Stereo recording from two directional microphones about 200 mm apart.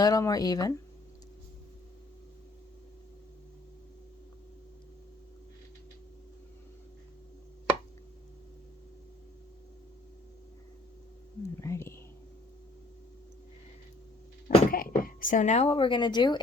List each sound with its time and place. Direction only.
0.0 s speech: 15° left (ahead or behind)
11.6 s whispering: 15° left (ahead or behind)
14.4 s speech: 45° left (ahead or behind); by 16.4 s 20° left (ahead or behind)